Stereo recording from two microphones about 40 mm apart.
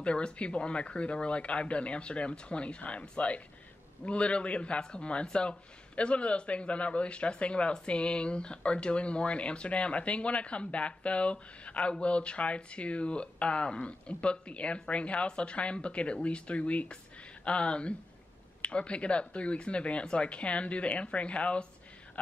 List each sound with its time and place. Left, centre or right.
0.0 s a man's voice: left